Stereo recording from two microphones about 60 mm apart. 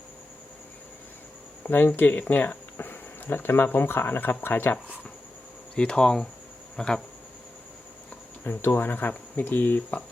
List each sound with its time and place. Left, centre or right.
1.6 s speech: left
5.7 s speech: centre
8.4 s speech: left